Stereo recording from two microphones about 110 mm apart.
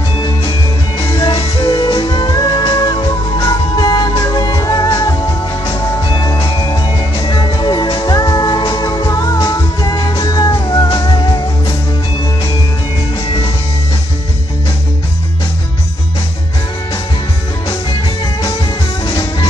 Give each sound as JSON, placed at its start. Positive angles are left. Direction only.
{"t": 0.4, "sound": "music", "side_deg": 55}
{"t": 1.0, "sound": "music", "side_deg": 35}
{"t": 19.0, "sound": "music", "side_deg": 35}